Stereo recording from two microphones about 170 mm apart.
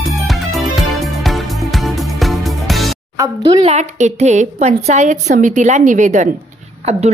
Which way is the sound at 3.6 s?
45° right (ahead or behind).